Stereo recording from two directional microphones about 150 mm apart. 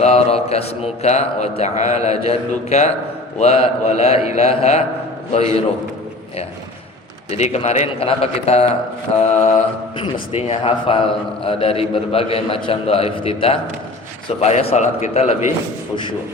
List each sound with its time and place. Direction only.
0.0 s a man's voice: 45° left (ahead or behind)
7.3 s a man's voice: 45° left (ahead or behind)